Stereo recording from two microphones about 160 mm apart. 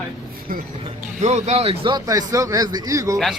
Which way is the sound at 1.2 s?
45° right (ahead or behind).